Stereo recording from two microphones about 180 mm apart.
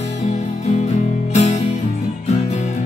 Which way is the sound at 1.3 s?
40° left (ahead or behind).